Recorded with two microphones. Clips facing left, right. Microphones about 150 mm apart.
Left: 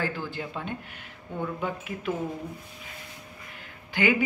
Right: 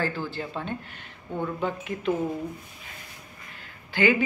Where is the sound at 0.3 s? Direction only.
10° left (ahead or behind).